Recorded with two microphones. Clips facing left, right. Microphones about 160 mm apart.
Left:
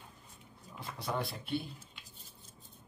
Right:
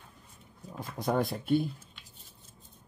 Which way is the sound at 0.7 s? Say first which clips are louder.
Right 8 dB; 45° right (ahead or behind).